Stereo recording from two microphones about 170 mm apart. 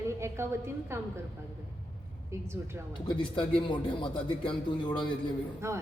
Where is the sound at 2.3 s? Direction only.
15° right (ahead or behind).